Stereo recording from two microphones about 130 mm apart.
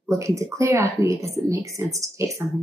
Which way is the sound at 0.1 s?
25° right (ahead or behind).